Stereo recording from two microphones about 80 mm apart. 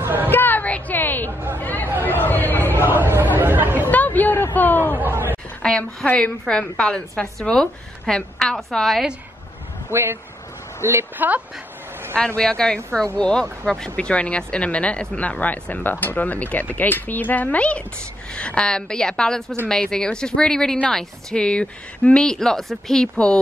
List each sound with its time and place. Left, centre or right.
0.0 s a sound: right
0.3 s a sound: left
1.6 s chatter: left
2.8 s chatter: right
3.9 s hubbub: left
4.6 s a sound: left
5.3 s speech: centre
9.8 s a woman's voice: right
12.4 s speech: centre